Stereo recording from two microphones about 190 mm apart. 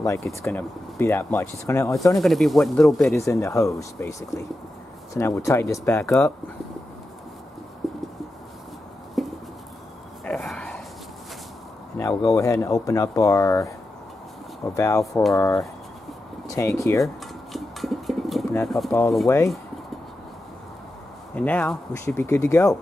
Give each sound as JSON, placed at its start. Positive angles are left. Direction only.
{"t": 0.4, "sound": "speech", "side_deg": 10}
{"t": 2.1, "sound": "speech", "side_deg": 0}
{"t": 3.2, "sound": "speech", "side_deg": 15}
{"t": 7.8, "sound": "a sound", "side_deg": 0}
{"t": 9.2, "sound": "a sound", "side_deg": 0}
{"t": 12.2, "sound": "speech", "side_deg": 15}
{"t": 17.0, "sound": "dishes", "side_deg": 0}
{"t": 18.9, "sound": "speech", "side_deg": 15}
{"t": 21.4, "sound": "speech", "side_deg": 5}